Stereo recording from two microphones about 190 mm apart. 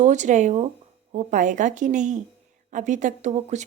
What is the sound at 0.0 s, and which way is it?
Speech, 40° right (ahead or behind).